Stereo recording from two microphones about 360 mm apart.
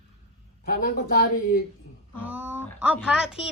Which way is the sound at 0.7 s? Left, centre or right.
Left.